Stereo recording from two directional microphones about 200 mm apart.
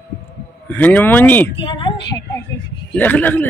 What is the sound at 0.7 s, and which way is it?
Speech, 10° left (ahead or behind).